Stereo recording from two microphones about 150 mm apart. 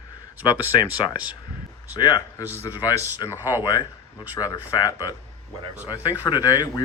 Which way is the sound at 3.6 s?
25° left (ahead or behind).